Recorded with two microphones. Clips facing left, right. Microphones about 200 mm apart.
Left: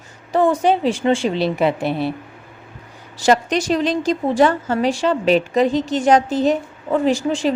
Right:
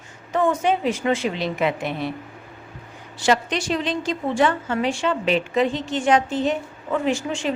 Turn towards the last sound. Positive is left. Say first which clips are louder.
# left 5 dB
turn(degrees=35)  # may be behind; listen again after turning